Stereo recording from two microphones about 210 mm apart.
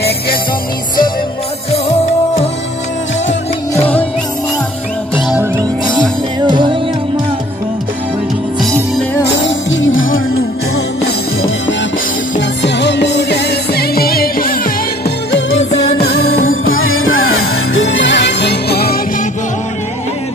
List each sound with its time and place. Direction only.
3.7 s music: 10° left (ahead or behind)
5.9 s music: 20° right (ahead or behind)
9.4 s music: 65° left (ahead or behind)
12.4 s music: 55° left (ahead or behind)
15.3 s music: 55° left (ahead or behind)
16.4 s music: 75° left (ahead or behind)
17.7 s music: 60° left (ahead or behind)